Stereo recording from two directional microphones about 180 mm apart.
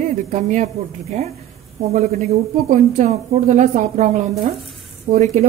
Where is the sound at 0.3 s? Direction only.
45° right (ahead or behind).